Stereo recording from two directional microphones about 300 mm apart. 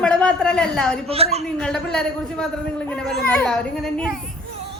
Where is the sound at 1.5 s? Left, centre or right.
Centre.